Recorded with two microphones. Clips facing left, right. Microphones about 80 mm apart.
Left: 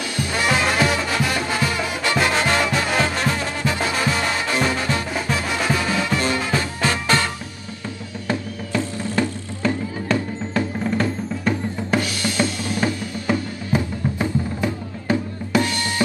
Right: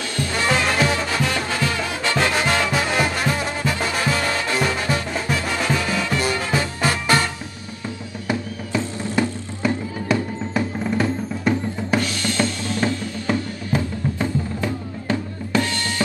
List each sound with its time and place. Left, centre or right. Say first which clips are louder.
0.1 s music: even; centre
6.2 s music: even; centre
8.3 s music: even; centre
12.4 s music: left 1 dB; centre